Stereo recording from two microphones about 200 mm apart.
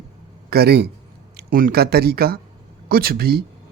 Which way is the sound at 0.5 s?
50° right (ahead or behind).